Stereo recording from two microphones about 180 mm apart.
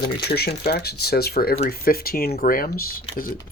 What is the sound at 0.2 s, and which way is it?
Speech, 60° left (ahead or behind).